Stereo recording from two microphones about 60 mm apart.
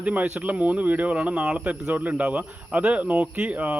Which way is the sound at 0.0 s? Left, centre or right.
Right.